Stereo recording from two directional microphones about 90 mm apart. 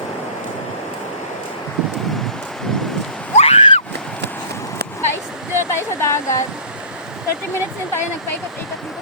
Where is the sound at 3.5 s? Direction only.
90° left.